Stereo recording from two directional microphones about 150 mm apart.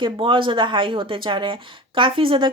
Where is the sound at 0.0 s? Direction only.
35° right (ahead or behind).